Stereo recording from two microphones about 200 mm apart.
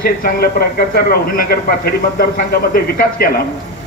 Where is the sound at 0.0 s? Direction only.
45° left (ahead or behind).